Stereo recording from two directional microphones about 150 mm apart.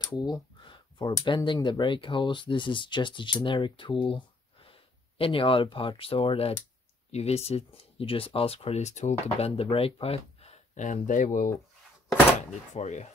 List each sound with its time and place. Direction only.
0.0 s speech: 30° left (ahead or behind); by 11.5 s 60° left (ahead or behind)
12.7 s speech: 50° left (ahead or behind)